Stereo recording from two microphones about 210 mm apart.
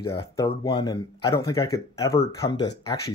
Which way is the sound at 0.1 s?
20° left (ahead or behind).